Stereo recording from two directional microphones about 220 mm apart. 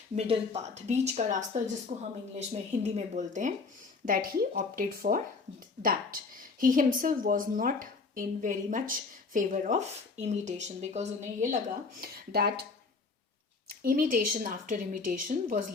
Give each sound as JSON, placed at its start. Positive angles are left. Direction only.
{"t": 0.2, "sound": "speech", "side_deg": -30}
{"t": 11.9, "sound": "speech", "side_deg": -45}
{"t": 13.7, "sound": "speech", "side_deg": -40}